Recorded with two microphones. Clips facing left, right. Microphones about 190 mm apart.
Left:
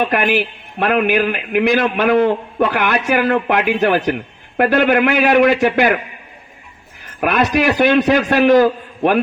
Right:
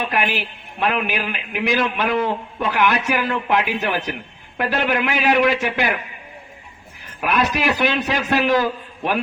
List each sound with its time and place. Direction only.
0.0 s a man's voice: 55° left (ahead or behind)
7.2 s a man's voice: 55° left (ahead or behind)